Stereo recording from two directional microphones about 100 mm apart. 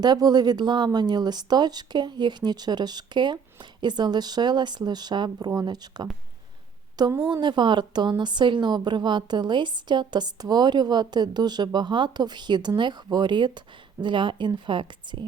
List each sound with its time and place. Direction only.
0.0 s a woman's voice: 45° right (ahead or behind)
7.3 s a woman's voice: 45° right (ahead or behind)